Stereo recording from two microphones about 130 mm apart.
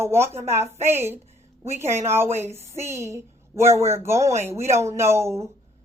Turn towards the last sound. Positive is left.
turn(degrees=-20)  # may be behind; listen again after turning